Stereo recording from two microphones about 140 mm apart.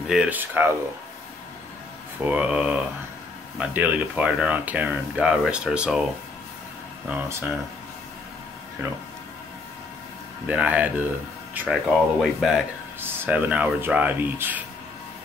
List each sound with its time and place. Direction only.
0.0 s speech: 5° right (ahead or behind)
2.2 s speech: 10° right (ahead or behind)
7.1 s speech: 20° right (ahead or behind)
10.4 s speech: 10° right (ahead or behind)
11.7 s speech: centre (ahead or behind)
13.0 s speech: 15° right (ahead or behind)